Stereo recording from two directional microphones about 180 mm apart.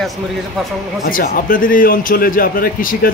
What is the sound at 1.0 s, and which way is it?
A man's voice, 50° left (ahead or behind).